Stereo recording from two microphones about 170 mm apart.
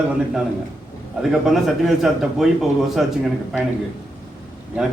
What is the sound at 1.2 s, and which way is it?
A man's voice, centre (ahead or behind).